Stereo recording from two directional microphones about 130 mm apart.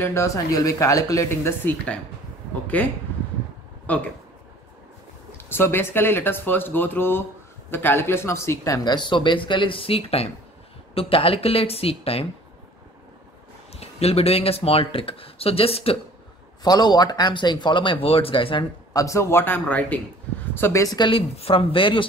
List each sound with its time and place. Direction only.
0.0 s speech: 20° left (ahead or behind)
5.5 s speech: 15° left (ahead or behind); by 12.3 s 45° left (ahead or behind)
13.7 s speech: 50° left (ahead or behind)
16.6 s speech: 30° left (ahead or behind)
18.9 s speech: 25° left (ahead or behind)
21.1 s speech: 45° left (ahead or behind)